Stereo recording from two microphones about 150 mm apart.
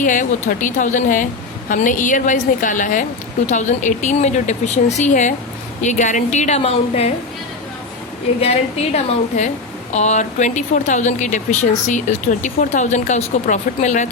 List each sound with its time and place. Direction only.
0.0 s a woman's voice: 60° left (ahead or behind); by 7.1 s 45° left (ahead or behind)
8.4 s speech: 45° left (ahead or behind)